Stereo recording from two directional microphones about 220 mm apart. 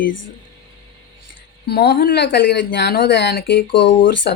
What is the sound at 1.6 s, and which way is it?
Speech, 45° left (ahead or behind).